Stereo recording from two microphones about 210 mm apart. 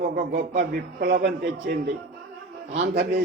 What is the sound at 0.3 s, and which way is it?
A man's voice, 45° right (ahead or behind).